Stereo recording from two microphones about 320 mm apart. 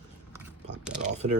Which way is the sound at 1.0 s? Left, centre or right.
Right.